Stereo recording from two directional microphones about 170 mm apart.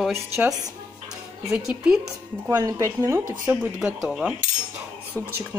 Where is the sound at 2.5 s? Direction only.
20° right (ahead or behind).